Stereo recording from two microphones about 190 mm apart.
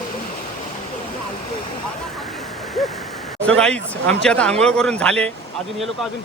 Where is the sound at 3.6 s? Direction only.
5° left (ahead or behind).